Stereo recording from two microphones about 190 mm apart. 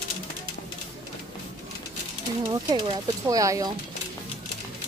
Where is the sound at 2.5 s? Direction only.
20° right (ahead or behind).